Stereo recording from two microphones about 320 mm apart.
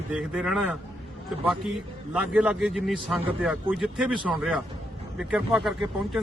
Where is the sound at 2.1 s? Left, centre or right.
Centre.